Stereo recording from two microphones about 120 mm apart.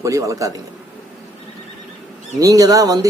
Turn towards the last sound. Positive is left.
turn(degrees=-30)  # may be behind; listen again after turning